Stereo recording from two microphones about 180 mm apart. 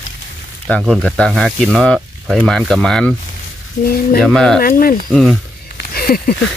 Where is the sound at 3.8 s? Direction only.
55° left (ahead or behind).